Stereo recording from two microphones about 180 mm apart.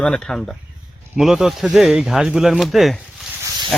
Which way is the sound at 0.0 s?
5° left (ahead or behind).